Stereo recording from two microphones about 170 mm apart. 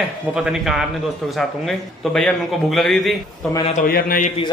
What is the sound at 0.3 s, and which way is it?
A man's voice, 5° right (ahead or behind).